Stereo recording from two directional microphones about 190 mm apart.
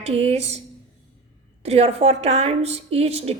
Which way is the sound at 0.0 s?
30° right (ahead or behind).